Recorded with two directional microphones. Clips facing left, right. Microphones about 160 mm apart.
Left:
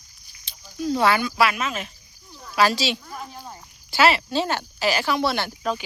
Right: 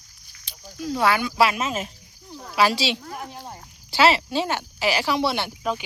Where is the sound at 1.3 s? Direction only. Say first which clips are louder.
Right 1 dB; 30° right (ahead or behind).